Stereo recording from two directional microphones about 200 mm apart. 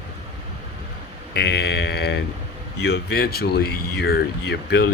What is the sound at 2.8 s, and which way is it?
Speech, 55° left (ahead or behind).